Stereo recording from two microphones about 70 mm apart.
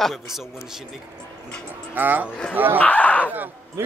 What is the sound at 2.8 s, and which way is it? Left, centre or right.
Speech, left.